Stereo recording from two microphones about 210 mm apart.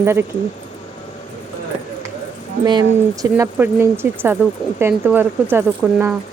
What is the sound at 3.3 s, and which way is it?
Speech, 10° right (ahead or behind).